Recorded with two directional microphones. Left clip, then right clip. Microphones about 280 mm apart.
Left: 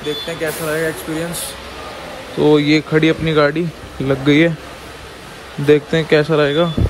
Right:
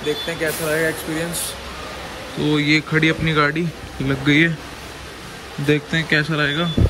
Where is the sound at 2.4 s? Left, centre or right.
Centre.